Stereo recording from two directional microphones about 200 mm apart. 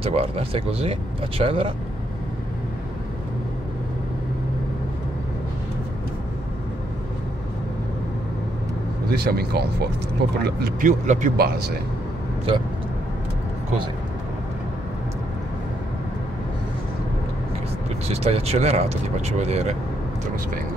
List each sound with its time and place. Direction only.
0.0 s speech: 30° right (ahead or behind)
9.1 s speech: 50° right (ahead or behind)
18.0 s speech: 30° right (ahead or behind)